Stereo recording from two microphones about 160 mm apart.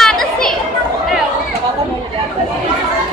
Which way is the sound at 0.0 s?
5° left (ahead or behind).